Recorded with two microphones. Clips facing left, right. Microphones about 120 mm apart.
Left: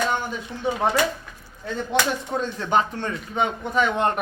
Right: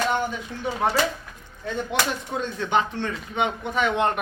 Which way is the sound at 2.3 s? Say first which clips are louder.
Left 2 dB; 40° left (ahead or behind).